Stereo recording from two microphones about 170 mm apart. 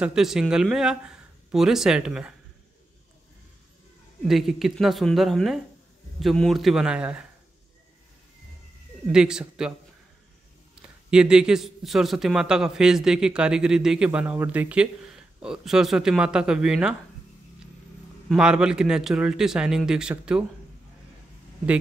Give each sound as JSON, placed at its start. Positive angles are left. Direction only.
{"t": 0.0, "sound": "a man's voice", "side_deg": -5}
{"t": 4.3, "sound": "a man's voice", "side_deg": 0}
{"t": 9.1, "sound": "a man's voice", "side_deg": -5}
{"t": 10.8, "sound": "a man's voice", "side_deg": -5}
{"t": 18.3, "sound": "a man's voice", "side_deg": -5}